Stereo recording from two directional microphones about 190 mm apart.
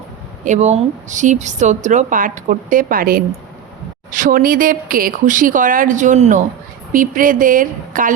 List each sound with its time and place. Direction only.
0.4 s a woman's voice: 40° right (ahead or behind)